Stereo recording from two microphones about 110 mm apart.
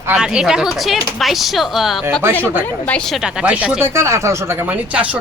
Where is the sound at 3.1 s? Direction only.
5° right (ahead or behind).